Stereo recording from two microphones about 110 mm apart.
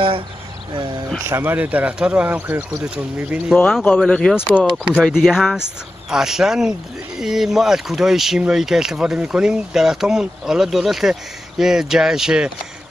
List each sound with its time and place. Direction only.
1.2 s speech: 20° right (ahead or behind)
4.1 s speech: 5° left (ahead or behind)
4.5 s speech: 10° right (ahead or behind)